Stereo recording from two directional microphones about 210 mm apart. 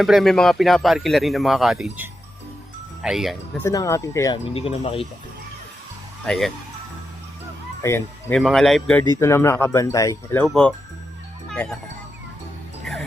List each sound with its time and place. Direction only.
0.0 s a man's voice: centre (ahead or behind)
3.6 s speech: 15° left (ahead or behind)
4.4 s speech: 25° left (ahead or behind)
6.2 s a man's voice: centre (ahead or behind)
7.8 s speech: 10° left (ahead or behind)
8.4 s speech: centre (ahead or behind)
10.4 s a man's voice: 5° left (ahead or behind)
11.4 s music: 5° left (ahead or behind)
12.8 s music: centre (ahead or behind)